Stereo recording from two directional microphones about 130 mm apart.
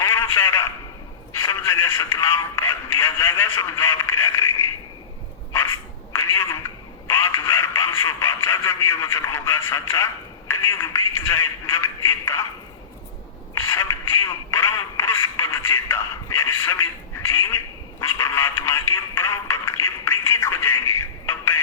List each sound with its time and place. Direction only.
0.0 s a sound: 20° left (ahead or behind)
1.3 s speech: 20° left (ahead or behind)
6.1 s speech: 20° left (ahead or behind)
13.5 s speech: 25° left (ahead or behind)
18.2 s speech: 20° left (ahead or behind)